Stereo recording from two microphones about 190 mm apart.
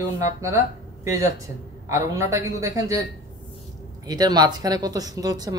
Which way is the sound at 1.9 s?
15° right (ahead or behind).